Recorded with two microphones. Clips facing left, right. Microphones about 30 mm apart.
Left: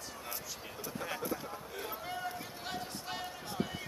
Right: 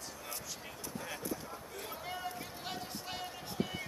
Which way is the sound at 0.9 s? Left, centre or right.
Centre.